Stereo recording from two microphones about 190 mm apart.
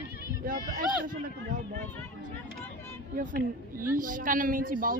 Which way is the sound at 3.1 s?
45° right (ahead or behind).